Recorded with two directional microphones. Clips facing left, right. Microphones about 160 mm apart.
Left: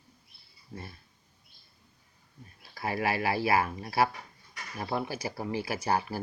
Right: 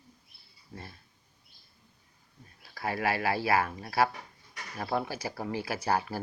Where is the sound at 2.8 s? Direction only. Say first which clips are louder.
Even; 20° left (ahead or behind).